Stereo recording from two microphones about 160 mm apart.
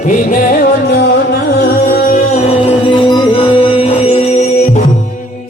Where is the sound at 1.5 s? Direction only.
70° left (ahead or behind).